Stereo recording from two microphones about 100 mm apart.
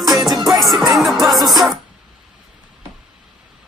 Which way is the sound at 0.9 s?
Centre (ahead or behind).